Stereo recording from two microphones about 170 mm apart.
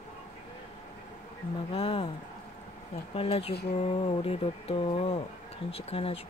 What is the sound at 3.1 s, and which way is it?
Speech, 35° left (ahead or behind).